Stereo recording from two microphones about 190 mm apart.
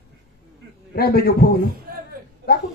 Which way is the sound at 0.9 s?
55° left (ahead or behind).